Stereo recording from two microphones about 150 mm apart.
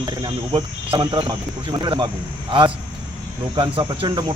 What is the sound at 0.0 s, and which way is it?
Speech, 30° right (ahead or behind).